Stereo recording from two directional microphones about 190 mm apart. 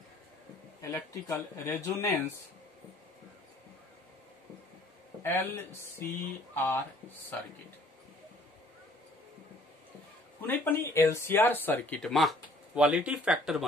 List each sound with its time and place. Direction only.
0.7 s speech: 15° left (ahead or behind)
5.2 s speech: 15° left (ahead or behind)
10.4 s speech: 10° left (ahead or behind)